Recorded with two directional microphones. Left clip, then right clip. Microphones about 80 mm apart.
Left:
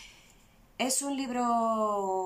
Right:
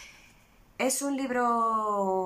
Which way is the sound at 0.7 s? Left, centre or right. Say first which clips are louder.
Right 2 dB; left.